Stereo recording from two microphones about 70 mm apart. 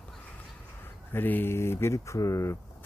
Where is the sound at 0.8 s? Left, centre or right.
Left.